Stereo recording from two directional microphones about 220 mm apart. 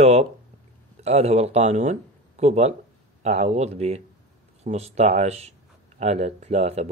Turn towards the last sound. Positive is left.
turn(degrees=-30)  # may be behind; listen again after turning